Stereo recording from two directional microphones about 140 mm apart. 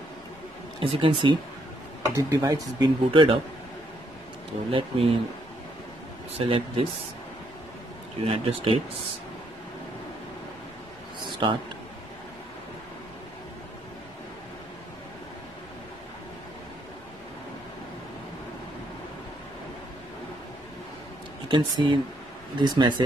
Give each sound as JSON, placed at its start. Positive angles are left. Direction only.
{"t": 0.7, "sound": "speech", "side_deg": -40}
{"t": 2.1, "sound": "speech", "side_deg": -25}
{"t": 4.6, "sound": "speech", "side_deg": -40}
{"t": 6.3, "sound": "speech", "side_deg": -40}
{"t": 8.2, "sound": "speech", "side_deg": -45}
{"t": 11.1, "sound": "a sound", "side_deg": -35}
{"t": 21.5, "sound": "speech", "side_deg": -30}